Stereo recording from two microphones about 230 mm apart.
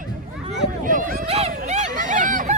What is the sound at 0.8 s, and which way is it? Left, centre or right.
Hubbub, right.